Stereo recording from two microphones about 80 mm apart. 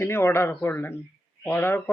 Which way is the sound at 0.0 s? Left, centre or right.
Left.